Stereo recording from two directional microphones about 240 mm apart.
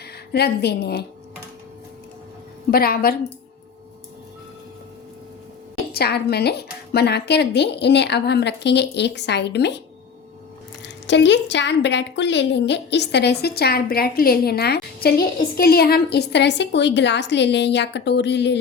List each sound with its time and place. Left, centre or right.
0.3 s a woman's voice: left
2.6 s a woman's voice: left
5.9 s a woman's voice: left
10.8 s a woman's voice: left